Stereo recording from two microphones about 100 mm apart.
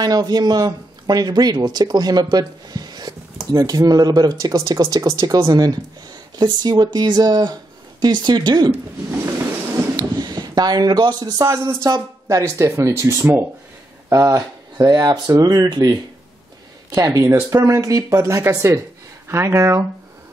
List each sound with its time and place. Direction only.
0.0 s speech: 40° right (ahead or behind)
9.9 s speech: 40° right (ahead or behind)